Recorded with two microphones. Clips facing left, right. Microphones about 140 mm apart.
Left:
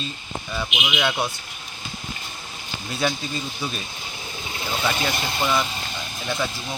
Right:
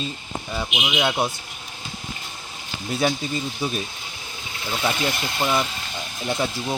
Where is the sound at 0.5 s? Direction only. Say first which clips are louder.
Right 1 dB; 20° right (ahead or behind).